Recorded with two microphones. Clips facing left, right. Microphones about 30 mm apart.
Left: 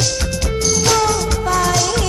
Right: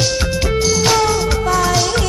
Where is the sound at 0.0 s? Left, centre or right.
Centre.